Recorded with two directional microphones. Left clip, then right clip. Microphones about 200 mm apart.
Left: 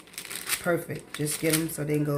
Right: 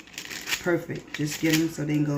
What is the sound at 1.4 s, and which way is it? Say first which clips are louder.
Speech: right 3 dB; 55° left (ahead or behind).